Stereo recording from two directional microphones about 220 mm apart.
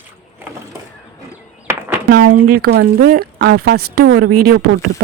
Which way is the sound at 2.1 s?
40° right (ahead or behind).